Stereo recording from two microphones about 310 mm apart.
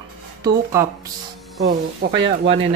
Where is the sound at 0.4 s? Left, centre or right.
Centre.